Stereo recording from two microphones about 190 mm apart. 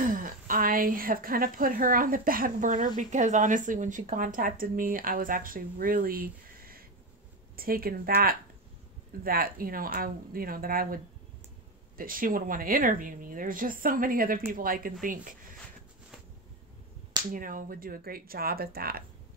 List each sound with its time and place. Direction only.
0.0 s a woman's voice: 45° right (ahead or behind)
12.0 s a woman's voice: 50° right (ahead or behind)
17.3 s a woman's voice: 45° right (ahead or behind)